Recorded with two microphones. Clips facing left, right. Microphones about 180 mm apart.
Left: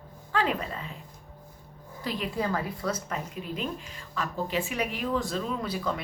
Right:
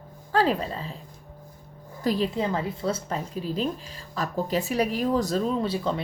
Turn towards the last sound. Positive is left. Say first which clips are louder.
# right 5 dB
turn(degrees=-30)  # may be behind; listen again after turning